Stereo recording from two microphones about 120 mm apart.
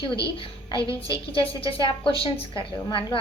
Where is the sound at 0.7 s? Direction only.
25° right (ahead or behind).